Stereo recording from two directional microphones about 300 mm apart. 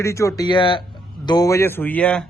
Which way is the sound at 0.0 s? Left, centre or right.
Centre.